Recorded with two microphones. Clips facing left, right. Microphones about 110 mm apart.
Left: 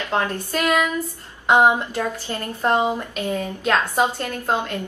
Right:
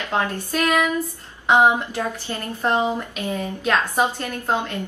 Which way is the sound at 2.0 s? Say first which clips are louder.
Left 1 dB; 15° right (ahead or behind).